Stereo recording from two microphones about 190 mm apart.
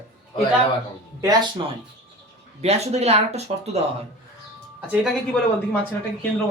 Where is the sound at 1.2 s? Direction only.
20° right (ahead or behind).